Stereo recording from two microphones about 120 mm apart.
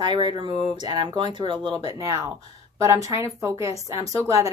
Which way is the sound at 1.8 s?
30° right (ahead or behind).